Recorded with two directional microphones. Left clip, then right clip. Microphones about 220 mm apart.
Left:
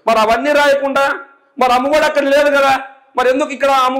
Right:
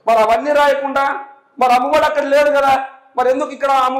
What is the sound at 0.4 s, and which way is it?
A man's voice, 40° left (ahead or behind).